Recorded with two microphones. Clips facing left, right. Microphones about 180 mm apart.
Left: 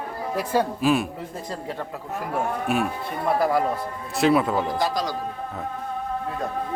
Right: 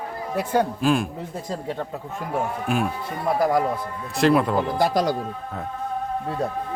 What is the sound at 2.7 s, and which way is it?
Speech, centre (ahead or behind).